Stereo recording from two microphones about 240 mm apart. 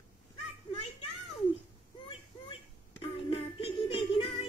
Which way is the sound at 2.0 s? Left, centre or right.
Left.